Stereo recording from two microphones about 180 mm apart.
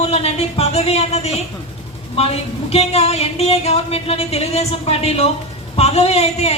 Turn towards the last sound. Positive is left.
turn(degrees=35)  # may be behind; listen again after turning